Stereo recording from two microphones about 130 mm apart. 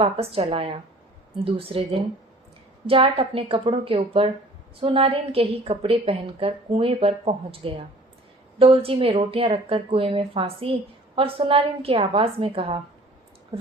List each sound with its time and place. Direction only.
0.0 s speech: 50° right (ahead or behind)